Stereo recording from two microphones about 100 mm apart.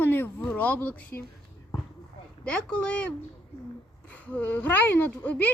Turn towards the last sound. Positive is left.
turn(degrees=15)  # may be behind; listen again after turning